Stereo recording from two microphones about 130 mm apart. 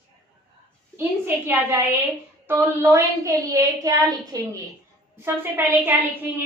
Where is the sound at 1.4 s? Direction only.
15° right (ahead or behind).